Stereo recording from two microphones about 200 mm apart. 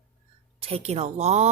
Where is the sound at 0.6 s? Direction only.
30° right (ahead or behind).